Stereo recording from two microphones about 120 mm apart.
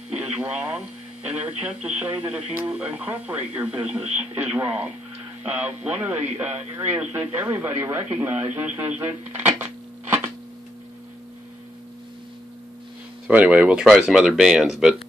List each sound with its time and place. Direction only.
0.1 s a man's voice: 10° right (ahead or behind)
13.3 s speech: 10° right (ahead or behind)